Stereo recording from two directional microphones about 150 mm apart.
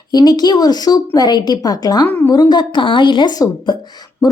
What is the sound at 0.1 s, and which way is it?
A woman's voice, 25° left (ahead or behind).